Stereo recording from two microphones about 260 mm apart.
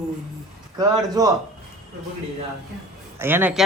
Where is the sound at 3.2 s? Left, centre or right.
Centre.